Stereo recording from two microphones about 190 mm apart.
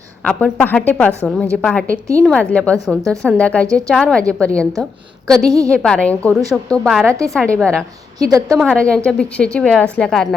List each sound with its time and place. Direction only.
0.3 s a woman's voice: 10° left (ahead or behind)
8.2 s a woman's voice: 20° right (ahead or behind)
8.4 s a woman's voice: 5° right (ahead or behind)
8.7 s a woman's voice: 5° left (ahead or behind)